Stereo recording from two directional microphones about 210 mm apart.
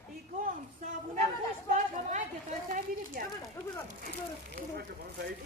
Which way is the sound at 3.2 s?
40° right (ahead or behind).